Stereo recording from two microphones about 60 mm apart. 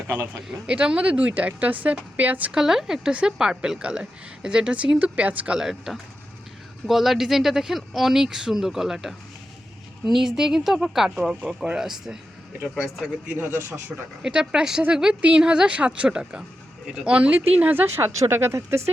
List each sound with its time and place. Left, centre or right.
0.1 s speech: right
0.7 s speech: right
2.5 s a woman's voice: centre
5.5 s a woman's voice: centre
11.6 s a woman's voice: centre
13.3 s speech: right
13.6 s a man's voice: right
14.2 s a woman's voice: centre; by 18.9 s right